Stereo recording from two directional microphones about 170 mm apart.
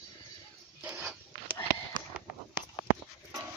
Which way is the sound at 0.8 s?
10° right (ahead or behind).